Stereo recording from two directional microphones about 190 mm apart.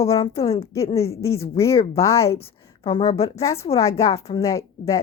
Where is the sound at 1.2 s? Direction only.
15° left (ahead or behind).